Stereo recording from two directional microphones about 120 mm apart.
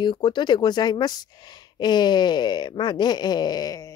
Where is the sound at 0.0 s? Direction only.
40° left (ahead or behind).